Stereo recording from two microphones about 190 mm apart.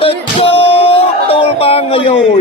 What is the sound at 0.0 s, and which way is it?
Music, 30° left (ahead or behind).